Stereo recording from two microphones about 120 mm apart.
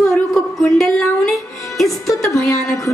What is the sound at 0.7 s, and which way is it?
Music, centre (ahead or behind).